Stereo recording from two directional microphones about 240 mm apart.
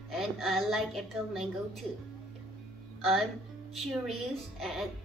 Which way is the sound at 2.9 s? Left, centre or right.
Centre.